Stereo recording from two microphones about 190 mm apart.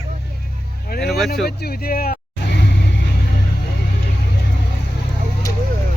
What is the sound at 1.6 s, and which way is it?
Speech, 55° left (ahead or behind).